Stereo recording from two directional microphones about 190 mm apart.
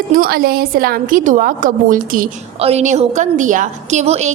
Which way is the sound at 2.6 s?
35° right (ahead or behind).